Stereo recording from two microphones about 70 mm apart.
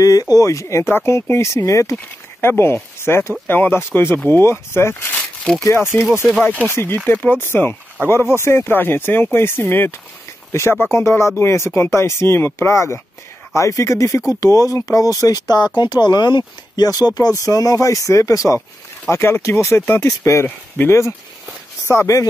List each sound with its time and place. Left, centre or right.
0.0 s speech: left
0.8 s speech: left
2.0 s speech: left
7.2 s speech: left
17.4 s speech: left